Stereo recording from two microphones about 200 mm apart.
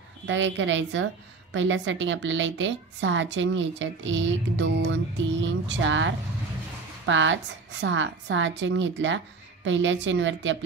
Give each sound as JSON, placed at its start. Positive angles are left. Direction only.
{"t": 0.3, "sound": "a woman's voice", "side_deg": -65}